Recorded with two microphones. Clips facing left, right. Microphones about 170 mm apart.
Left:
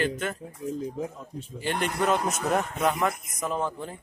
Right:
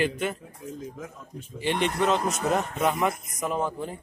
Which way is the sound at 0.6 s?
35° left (ahead or behind).